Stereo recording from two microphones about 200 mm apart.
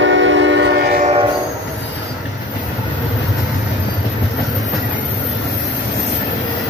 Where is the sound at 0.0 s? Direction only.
70° right (ahead or behind).